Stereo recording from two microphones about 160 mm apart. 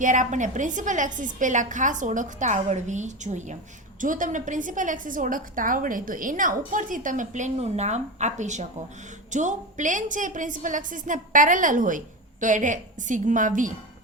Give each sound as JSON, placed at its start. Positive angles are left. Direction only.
{"t": 0.0, "sound": "a woman's voice", "side_deg": -55}